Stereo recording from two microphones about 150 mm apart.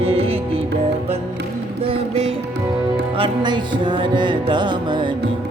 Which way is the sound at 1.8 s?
40° right (ahead or behind).